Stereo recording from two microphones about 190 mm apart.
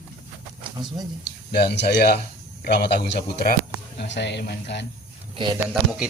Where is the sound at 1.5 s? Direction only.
60° left (ahead or behind).